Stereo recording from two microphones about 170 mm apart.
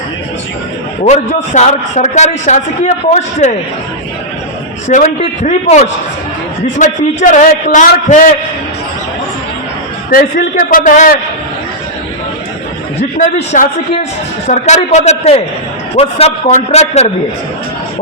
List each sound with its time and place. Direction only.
1.0 s a man's voice: 45° left (ahead or behind)
4.9 s a man's voice: 45° left (ahead or behind)
10.1 s a man's voice: 60° left (ahead or behind)
13.0 s a man's voice: 45° left (ahead or behind)